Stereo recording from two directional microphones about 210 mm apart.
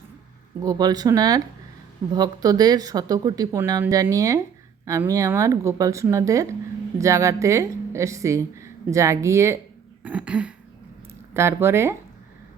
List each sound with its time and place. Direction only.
0.6 s a woman's voice: 20° right (ahead or behind)